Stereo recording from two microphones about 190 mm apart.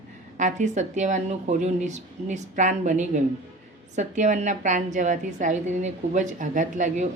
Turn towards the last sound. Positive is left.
turn(degrees=-40)  # may be behind; listen again after turning